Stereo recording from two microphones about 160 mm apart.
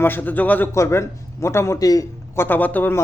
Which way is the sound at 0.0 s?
10° left (ahead or behind).